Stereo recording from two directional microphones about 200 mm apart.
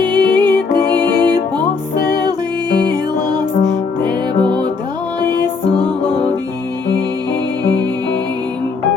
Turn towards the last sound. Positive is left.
turn(degrees=-20)  # may be behind; listen again after turning